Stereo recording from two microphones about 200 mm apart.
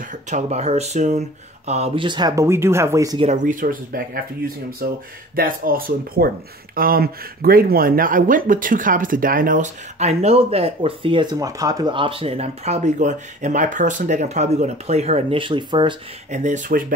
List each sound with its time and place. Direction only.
0.3 s speech: 35° right (ahead or behind); by 3.3 s 15° right (ahead or behind)
3.3 s speech: 40° right (ahead or behind); by 16.0 s 25° right (ahead or behind)
16.3 s speech: 35° right (ahead or behind)